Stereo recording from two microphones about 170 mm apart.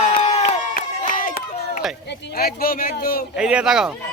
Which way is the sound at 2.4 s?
65° left (ahead or behind).